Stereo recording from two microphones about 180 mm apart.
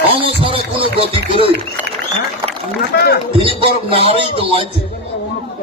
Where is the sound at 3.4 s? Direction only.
30° right (ahead or behind).